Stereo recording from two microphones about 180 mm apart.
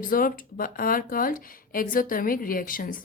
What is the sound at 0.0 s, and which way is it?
Speech, 50° left (ahead or behind).